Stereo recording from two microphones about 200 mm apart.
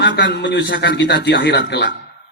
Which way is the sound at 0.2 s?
55° left (ahead or behind).